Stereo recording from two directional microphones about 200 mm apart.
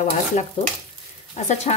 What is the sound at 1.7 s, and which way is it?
Speech, 35° left (ahead or behind).